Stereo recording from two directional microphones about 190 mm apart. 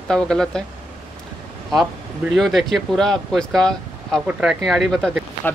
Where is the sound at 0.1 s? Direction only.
5° left (ahead or behind).